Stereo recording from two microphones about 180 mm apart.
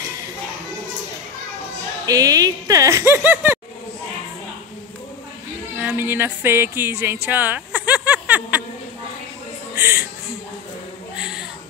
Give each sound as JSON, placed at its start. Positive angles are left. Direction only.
{"t": 2.0, "sound": "a woman's voice", "side_deg": -20}
{"t": 5.8, "sound": "speech", "side_deg": -10}
{"t": 9.8, "sound": "music", "side_deg": -15}
{"t": 11.1, "sound": "a sound", "side_deg": -5}